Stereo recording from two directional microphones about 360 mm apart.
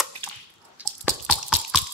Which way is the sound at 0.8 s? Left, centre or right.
Centre.